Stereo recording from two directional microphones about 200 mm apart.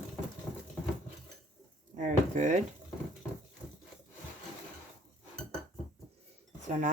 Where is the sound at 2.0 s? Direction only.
40° right (ahead or behind).